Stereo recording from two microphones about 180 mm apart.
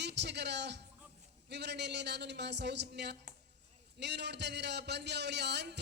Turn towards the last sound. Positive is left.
turn(degrees=-70)  # may be behind; listen again after turning